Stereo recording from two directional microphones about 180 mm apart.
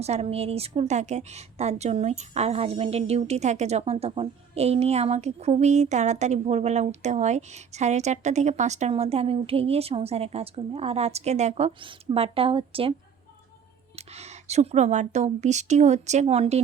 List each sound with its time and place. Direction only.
0.0 s a woman's voice: 35° right (ahead or behind)
13.9 s a woman's voice: 35° right (ahead or behind)